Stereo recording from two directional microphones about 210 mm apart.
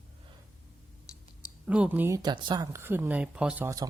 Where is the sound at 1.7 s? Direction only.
5° right (ahead or behind).